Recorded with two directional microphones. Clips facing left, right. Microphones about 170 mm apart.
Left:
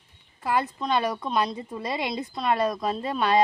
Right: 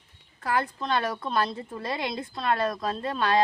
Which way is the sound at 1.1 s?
Centre (ahead or behind).